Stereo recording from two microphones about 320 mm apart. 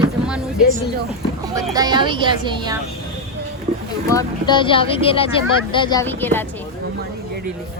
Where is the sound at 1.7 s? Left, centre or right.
Centre.